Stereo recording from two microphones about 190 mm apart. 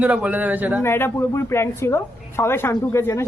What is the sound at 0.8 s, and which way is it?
Speech, 10° left (ahead or behind).